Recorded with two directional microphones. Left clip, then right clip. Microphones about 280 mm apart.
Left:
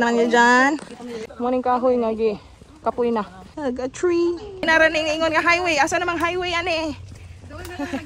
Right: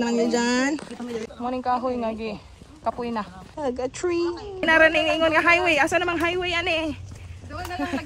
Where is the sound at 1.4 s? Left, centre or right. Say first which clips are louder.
Left 6 dB; left.